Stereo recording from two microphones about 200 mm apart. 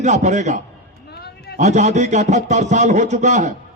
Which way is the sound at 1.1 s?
55° left (ahead or behind).